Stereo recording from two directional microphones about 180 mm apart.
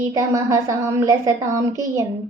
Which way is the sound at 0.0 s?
15° right (ahead or behind).